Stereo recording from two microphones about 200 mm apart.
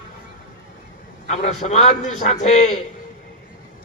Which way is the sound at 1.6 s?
35° left (ahead or behind).